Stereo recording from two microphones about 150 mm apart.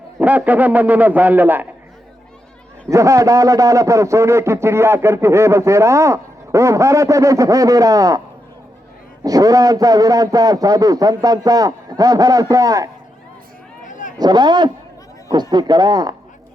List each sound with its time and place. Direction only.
0.2 s a man's voice: 10° right (ahead or behind)
2.9 s a man's voice: 20° right (ahead or behind)
9.2 s a man's voice: 25° right (ahead or behind)
13.8 s a sound: 55° left (ahead or behind)
14.2 s a man's voice: 30° right (ahead or behind)